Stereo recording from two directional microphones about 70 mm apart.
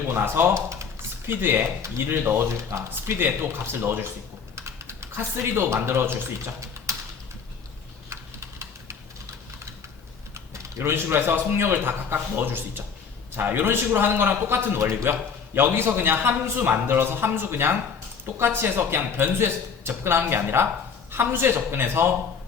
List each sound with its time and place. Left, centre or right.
0.1 s a man's voice: right
8.1 s typing: right
10.3 s a man's voice: right